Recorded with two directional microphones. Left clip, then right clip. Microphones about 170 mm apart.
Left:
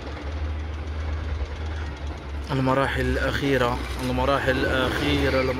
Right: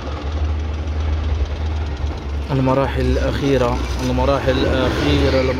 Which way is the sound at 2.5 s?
Centre (ahead or behind).